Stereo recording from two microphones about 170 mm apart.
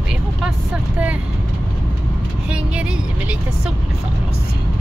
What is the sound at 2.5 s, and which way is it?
Speech, 5° right (ahead or behind).